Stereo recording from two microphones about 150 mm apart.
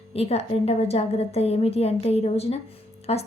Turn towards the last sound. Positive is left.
turn(degrees=40)  # may be behind; listen again after turning